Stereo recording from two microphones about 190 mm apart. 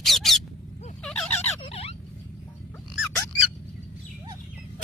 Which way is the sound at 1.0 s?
5° left (ahead or behind).